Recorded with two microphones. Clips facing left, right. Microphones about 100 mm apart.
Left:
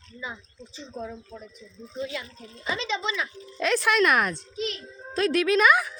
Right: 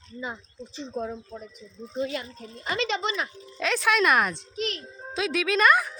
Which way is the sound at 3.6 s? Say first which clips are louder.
Left 1 dB; centre (ahead or behind).